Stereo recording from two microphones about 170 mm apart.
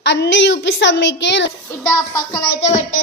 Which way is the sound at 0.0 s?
90° left.